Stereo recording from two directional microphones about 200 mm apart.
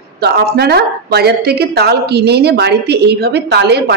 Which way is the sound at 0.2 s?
55° right (ahead or behind).